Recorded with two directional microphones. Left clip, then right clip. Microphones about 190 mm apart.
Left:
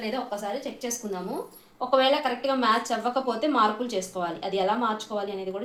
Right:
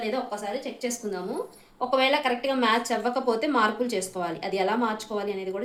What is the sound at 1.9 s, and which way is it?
Speech, 20° right (ahead or behind).